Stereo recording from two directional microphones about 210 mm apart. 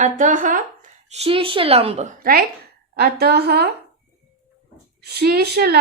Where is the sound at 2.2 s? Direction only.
45° right (ahead or behind).